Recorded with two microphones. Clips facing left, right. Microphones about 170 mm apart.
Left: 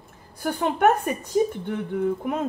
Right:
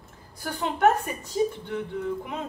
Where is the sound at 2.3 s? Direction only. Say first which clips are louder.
Left 8 dB; 50° left (ahead or behind).